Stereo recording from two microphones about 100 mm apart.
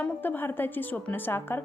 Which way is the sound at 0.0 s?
20° left (ahead or behind).